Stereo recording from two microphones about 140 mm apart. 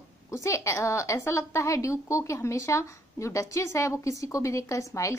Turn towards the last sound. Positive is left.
turn(degrees=20)  # may be behind; listen again after turning